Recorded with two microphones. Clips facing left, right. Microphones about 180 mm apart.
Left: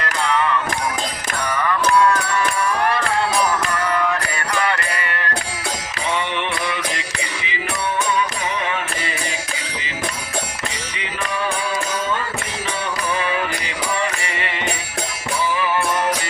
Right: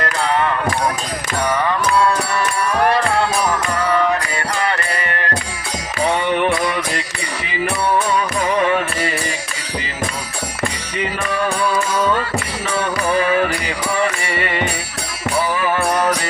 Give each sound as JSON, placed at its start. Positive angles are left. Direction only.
{"t": 4.6, "sound": "music", "side_deg": -35}
{"t": 6.1, "sound": "music", "side_deg": -45}
{"t": 13.0, "sound": "music", "side_deg": -50}